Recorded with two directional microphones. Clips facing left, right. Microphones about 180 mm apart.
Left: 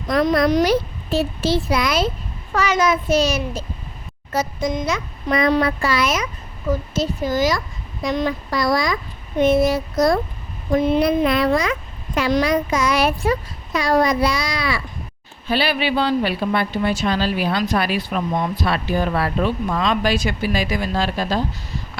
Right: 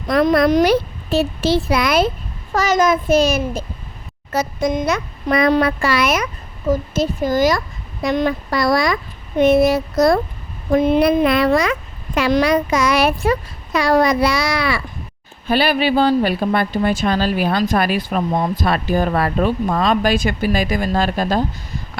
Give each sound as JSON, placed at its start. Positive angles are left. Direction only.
{"t": 0.1, "sound": "a child's voice", "side_deg": -60}
{"t": 2.5, "sound": "speech", "side_deg": -40}
{"t": 4.3, "sound": "a child's voice", "side_deg": -65}
{"t": 6.7, "sound": "a child's voice", "side_deg": -50}
{"t": 10.7, "sound": "speech", "side_deg": -55}
{"t": 15.4, "sound": "speech", "side_deg": -50}